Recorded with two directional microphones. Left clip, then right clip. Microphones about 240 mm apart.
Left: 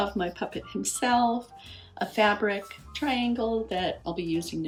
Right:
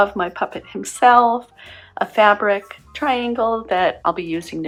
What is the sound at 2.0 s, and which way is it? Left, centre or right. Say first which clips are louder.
Speech: right 10 dB; right.